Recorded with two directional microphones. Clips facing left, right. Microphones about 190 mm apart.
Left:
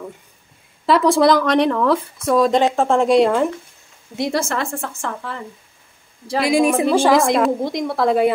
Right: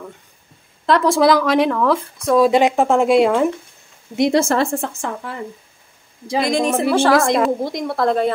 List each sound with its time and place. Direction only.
0.8 s speech: centre (ahead or behind)
4.2 s a woman's voice: 20° right (ahead or behind)
4.5 s a woman's voice: 30° right (ahead or behind)
4.8 s speech: 15° right (ahead or behind)
6.4 s a woman's voice: 5° left (ahead or behind)
7.2 s speech: centre (ahead or behind)